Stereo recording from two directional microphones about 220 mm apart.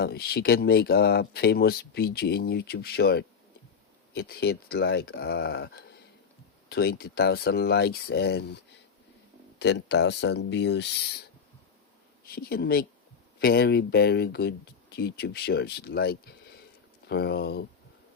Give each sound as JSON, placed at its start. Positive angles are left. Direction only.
{"t": 0.0, "sound": "speech", "side_deg": 45}
{"t": 9.6, "sound": "speech", "side_deg": 50}
{"t": 12.2, "sound": "speech", "side_deg": 45}